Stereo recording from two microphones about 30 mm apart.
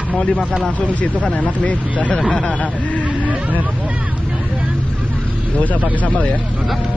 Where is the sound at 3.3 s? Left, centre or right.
Right.